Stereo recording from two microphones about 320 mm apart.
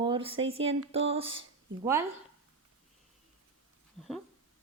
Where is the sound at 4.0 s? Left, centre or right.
Centre.